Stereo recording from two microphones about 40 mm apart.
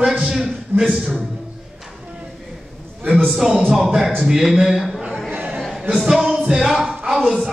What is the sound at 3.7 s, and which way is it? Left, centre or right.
A man's voice, centre.